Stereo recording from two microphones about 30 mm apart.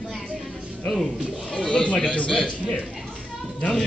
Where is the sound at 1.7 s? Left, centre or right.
Left.